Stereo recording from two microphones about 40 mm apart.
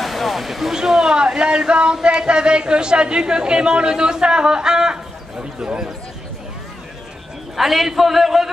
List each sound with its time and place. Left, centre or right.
0.0 s a sound: centre
0.7 s a woman's voice: centre
7.5 s a man's voice: centre